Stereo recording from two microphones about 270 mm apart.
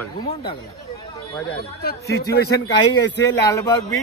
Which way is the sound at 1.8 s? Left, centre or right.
Left.